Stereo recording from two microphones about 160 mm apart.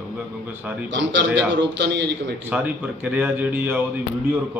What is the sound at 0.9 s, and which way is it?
A man's voice, 90° right.